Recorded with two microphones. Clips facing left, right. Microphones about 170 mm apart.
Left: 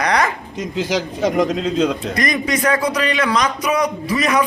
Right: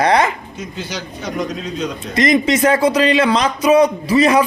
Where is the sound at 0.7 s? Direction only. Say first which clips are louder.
Left 9 dB; 90° left.